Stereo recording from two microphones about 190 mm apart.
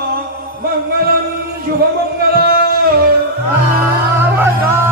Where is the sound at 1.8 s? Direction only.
55° right (ahead or behind).